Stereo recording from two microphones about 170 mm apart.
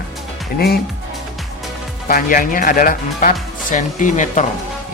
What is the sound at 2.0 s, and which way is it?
Speech, 55° left (ahead or behind).